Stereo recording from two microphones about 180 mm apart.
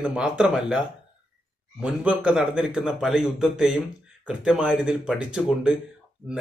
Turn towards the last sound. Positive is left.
turn(degrees=-5)  # may be behind; listen again after turning